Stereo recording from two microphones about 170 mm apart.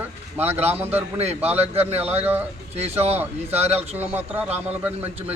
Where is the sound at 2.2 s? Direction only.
10° right (ahead or behind).